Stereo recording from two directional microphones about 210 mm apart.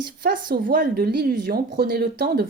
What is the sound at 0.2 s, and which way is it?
Speech, 45° right (ahead or behind).